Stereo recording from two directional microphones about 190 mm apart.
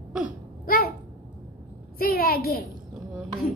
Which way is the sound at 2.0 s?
50° left (ahead or behind).